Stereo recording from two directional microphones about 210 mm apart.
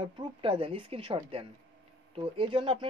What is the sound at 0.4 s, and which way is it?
Speech, 25° right (ahead or behind).